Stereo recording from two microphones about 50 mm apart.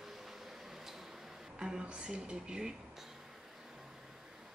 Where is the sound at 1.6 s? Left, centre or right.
Centre.